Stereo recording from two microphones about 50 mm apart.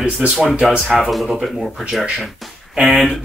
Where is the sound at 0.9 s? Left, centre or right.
Centre.